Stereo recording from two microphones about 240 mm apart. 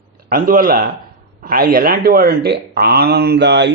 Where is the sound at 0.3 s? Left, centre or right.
Right.